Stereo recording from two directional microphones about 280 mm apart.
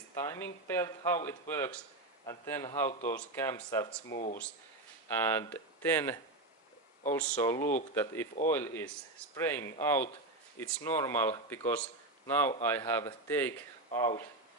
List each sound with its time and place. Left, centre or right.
0.1 s speech: centre
4.1 s speech: left
5.0 s speech: centre